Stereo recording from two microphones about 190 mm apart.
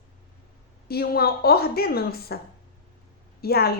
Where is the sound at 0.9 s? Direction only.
55° left (ahead or behind).